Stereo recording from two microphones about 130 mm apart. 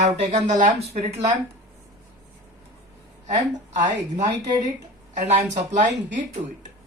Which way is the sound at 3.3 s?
65° right (ahead or behind).